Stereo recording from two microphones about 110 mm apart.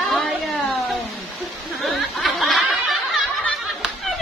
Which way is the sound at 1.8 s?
Centre (ahead or behind).